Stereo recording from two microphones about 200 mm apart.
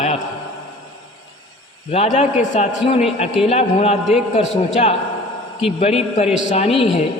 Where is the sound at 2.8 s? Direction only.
30° left (ahead or behind).